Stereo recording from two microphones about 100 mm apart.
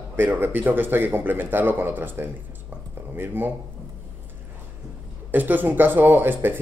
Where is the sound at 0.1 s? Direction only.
20° right (ahead or behind).